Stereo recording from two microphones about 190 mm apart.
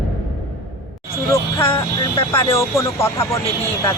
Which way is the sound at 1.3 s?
15° left (ahead or behind).